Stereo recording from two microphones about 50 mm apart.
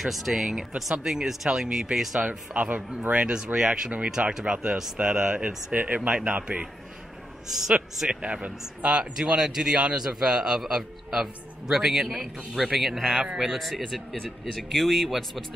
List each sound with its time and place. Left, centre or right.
0.0 s a man's voice: centre
2.2 s speech: right
3.5 s a man's voice: centre
5.7 s speech: right
5.9 s a man's voice: centre
6.2 s a man's voice: right; by 13.2 s centre
13.2 s a man's voice: centre
13.5 s a man's voice: centre